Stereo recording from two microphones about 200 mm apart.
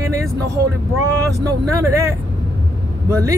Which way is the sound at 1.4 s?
15° right (ahead or behind).